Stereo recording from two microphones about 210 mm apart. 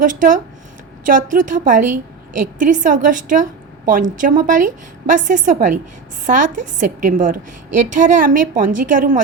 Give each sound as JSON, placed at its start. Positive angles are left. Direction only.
{"t": 0.0, "sound": "a woman's voice", "side_deg": -40}